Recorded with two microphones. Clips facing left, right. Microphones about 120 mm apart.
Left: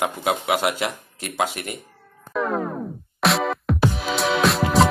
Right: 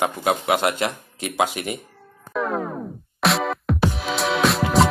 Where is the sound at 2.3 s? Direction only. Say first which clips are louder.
Left 1 dB; centre (ahead or behind).